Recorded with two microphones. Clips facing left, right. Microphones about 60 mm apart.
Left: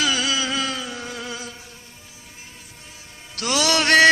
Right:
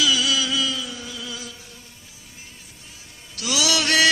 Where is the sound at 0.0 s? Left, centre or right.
Left.